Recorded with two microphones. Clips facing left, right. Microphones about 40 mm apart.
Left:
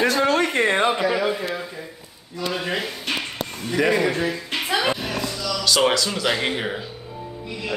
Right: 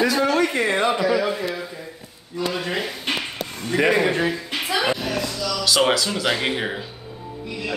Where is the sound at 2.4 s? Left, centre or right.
Centre.